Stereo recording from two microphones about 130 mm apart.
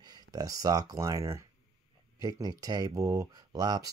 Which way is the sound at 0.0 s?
30° right (ahead or behind).